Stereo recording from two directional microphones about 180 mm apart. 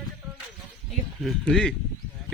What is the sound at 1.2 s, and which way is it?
Speech, centre (ahead or behind).